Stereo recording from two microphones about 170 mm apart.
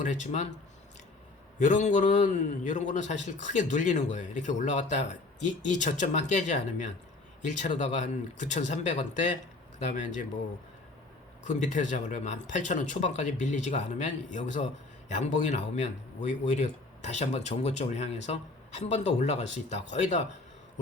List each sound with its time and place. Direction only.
0.0 s a man's voice: 45° left (ahead or behind)
1.5 s a man's voice: 45° left (ahead or behind)
11.4 s a man's voice: 45° left (ahead or behind)